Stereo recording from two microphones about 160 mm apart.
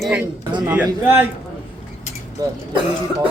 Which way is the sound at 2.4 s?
25° right (ahead or behind).